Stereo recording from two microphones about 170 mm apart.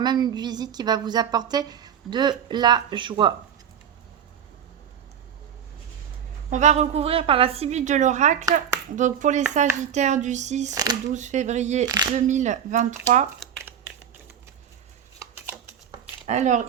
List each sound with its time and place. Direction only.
0.0 s a woman's voice: 25° right (ahead or behind)
6.5 s a woman's voice: 40° right (ahead or behind)
10.7 s a woman's voice: 20° right (ahead or behind)
11.1 s speech: 45° right (ahead or behind)
13.6 s a sound: 10° right (ahead or behind)
15.2 s shuffling cards: 15° right (ahead or behind)
16.2 s speech: 45° right (ahead or behind)